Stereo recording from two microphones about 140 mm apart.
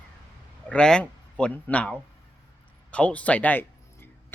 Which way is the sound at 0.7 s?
5° left (ahead or behind).